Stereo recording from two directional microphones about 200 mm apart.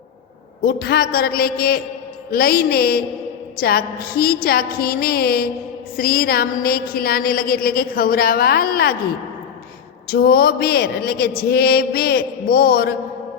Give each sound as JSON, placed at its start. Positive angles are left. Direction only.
{"t": 0.6, "sound": "a woman's voice", "side_deg": 50}
{"t": 10.1, "sound": "a woman's voice", "side_deg": 50}